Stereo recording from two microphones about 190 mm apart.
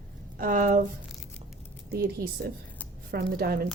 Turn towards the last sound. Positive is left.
turn(degrees=-55)  # may be behind; listen again after turning